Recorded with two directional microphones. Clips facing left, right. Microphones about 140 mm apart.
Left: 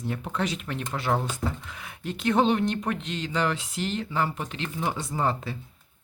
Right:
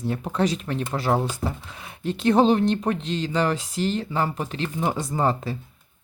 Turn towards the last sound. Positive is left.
turn(degrees=-40)  # may be behind; listen again after turning